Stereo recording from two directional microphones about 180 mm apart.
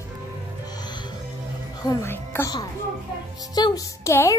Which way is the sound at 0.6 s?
25° left (ahead or behind).